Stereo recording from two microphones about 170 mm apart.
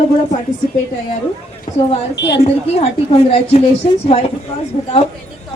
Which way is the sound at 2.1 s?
90° left.